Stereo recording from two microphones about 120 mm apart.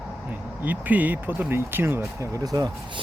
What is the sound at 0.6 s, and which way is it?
Speech, 15° right (ahead or behind).